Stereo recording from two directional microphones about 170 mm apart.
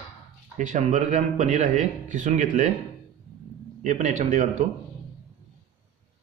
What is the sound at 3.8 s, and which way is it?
Speech, 45° right (ahead or behind).